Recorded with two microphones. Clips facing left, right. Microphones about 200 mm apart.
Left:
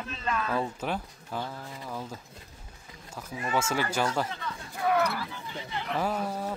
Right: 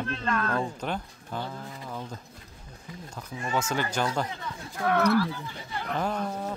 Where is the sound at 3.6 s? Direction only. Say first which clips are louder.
Even; 5° left (ahead or behind).